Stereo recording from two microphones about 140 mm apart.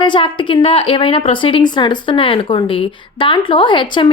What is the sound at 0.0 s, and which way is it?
A woman's voice, 35° left (ahead or behind).